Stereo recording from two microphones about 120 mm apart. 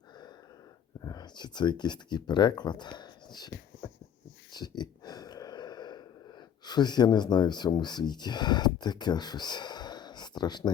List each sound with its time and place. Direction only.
1.0 s speech: 35° left (ahead or behind)
4.5 s a sound: 35° left (ahead or behind)
6.7 s speech: 35° left (ahead or behind)